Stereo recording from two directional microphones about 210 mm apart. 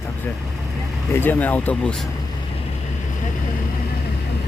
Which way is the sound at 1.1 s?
10° left (ahead or behind).